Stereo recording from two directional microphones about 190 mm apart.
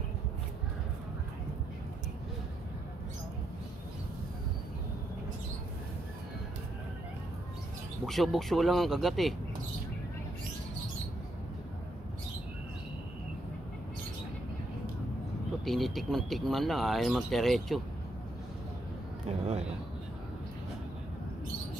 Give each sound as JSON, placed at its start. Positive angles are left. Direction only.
{"t": 8.1, "sound": "speech", "side_deg": 0}
{"t": 15.6, "sound": "speech", "side_deg": 0}
{"t": 19.2, "sound": "a sound", "side_deg": -35}